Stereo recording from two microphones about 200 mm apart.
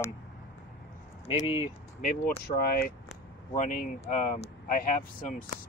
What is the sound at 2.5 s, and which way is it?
Speech, 50° left (ahead or behind).